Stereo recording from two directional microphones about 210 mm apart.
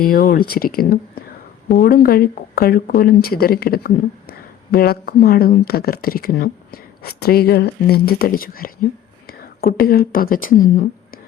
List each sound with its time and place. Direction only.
0.0 s speech: 45° left (ahead or behind)